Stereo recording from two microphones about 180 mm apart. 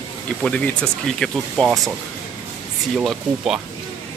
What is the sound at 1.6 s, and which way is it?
Speech, 20° right (ahead or behind).